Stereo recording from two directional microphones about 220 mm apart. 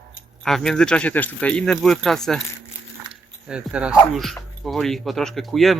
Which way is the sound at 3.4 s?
5° right (ahead or behind).